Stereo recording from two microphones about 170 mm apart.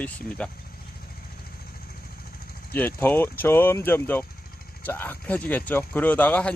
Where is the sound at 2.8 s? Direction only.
10° left (ahead or behind).